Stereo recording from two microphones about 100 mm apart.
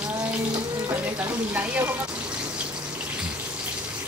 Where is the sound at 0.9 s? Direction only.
20° right (ahead or behind).